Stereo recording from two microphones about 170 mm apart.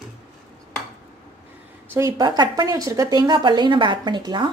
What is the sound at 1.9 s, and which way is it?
A woman's voice, 20° right (ahead or behind).